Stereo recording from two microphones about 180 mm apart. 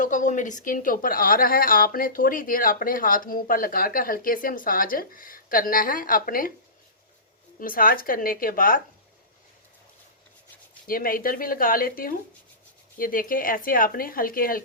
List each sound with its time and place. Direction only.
0.0 s speech: 45° left (ahead or behind)
7.6 s speech: 50° left (ahead or behind)
10.8 s speech: 50° left (ahead or behind)